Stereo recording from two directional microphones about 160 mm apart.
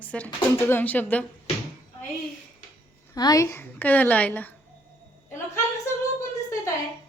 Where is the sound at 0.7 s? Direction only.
10° left (ahead or behind).